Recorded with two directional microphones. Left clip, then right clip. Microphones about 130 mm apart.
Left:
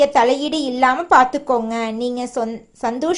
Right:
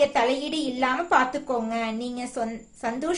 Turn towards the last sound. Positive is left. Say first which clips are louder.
# left 8 dB
turn(degrees=45)  # may be behind; listen again after turning